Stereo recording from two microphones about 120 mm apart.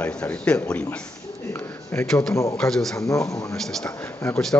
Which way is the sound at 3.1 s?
25° left (ahead or behind).